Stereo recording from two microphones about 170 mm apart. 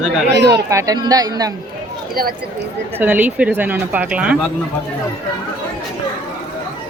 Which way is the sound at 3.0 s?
10° right (ahead or behind).